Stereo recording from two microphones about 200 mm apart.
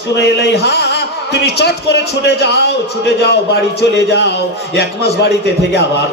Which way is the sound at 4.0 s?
55° left (ahead or behind).